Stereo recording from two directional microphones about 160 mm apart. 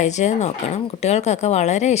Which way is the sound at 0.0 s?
45° left (ahead or behind).